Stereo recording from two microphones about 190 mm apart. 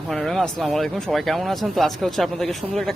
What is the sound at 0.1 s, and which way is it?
Speech, centre (ahead or behind).